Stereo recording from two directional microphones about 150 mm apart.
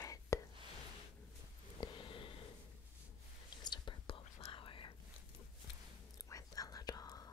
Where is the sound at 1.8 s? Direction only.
35° left (ahead or behind).